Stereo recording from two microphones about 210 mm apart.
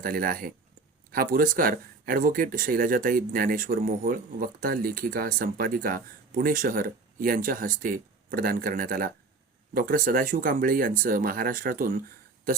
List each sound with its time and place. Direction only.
0.0 s speech: 45° right (ahead or behind)